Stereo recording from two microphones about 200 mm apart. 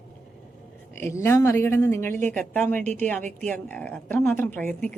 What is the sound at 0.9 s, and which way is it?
A woman's voice, 10° left (ahead or behind).